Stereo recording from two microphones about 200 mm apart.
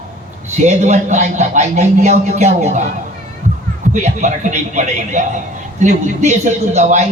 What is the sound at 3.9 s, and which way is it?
A man's voice, 35° right (ahead or behind).